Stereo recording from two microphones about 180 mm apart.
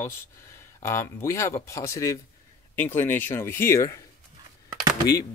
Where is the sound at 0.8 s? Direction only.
15° left (ahead or behind).